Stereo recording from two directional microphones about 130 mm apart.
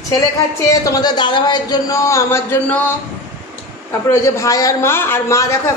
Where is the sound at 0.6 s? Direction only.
25° left (ahead or behind).